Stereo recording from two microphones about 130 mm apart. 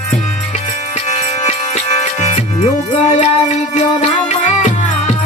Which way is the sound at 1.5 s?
65° left (ahead or behind).